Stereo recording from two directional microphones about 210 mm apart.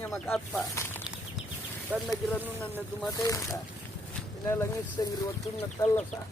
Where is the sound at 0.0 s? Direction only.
Centre (ahead or behind).